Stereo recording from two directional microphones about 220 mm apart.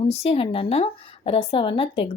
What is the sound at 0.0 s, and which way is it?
Speech, 30° left (ahead or behind).